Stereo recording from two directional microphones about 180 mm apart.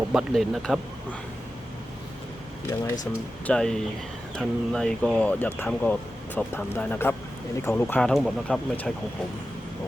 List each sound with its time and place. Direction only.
0.1 s speech: centre (ahead or behind)
2.6 s speech: 20° left (ahead or behind)
3.4 s speech: 5° left (ahead or behind)